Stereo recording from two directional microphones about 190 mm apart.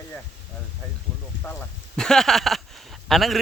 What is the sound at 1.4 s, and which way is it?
Speech, 5° left (ahead or behind).